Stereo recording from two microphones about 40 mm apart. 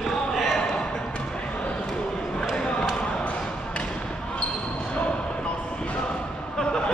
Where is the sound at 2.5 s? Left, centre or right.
Left.